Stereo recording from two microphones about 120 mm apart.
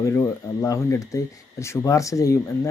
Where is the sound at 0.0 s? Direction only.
25° left (ahead or behind).